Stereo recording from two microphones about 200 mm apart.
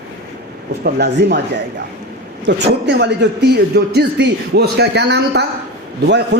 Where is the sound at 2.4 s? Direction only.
60° right (ahead or behind).